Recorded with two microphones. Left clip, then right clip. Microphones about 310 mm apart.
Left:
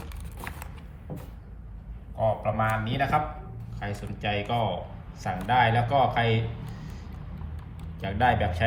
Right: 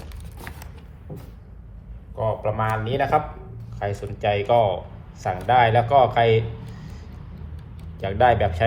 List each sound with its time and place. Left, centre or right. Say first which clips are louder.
0.3 s a sound: even; centre
2.1 s speech: right 2 dB; centre
8.0 s speech: right 6 dB; centre